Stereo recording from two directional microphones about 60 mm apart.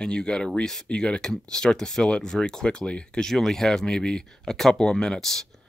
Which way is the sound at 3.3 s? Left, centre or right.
Centre.